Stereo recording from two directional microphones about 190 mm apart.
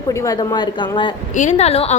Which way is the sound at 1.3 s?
40° left (ahead or behind).